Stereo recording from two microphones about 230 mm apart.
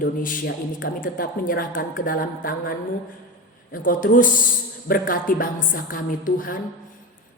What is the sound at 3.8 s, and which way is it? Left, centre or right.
Speech, left.